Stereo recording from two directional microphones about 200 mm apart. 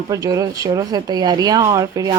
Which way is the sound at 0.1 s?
15° right (ahead or behind).